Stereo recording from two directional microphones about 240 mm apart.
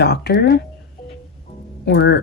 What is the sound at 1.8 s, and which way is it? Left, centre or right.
Speech, left.